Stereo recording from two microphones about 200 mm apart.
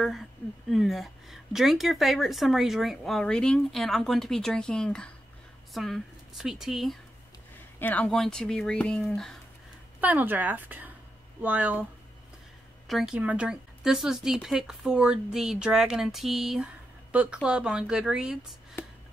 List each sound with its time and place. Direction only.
0.0 s a woman's voice: centre (ahead or behind)
9.9 s speech: 10° right (ahead or behind)
12.8 s a woman's voice: centre (ahead or behind)